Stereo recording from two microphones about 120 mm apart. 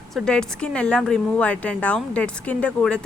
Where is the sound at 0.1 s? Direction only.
5° left (ahead or behind).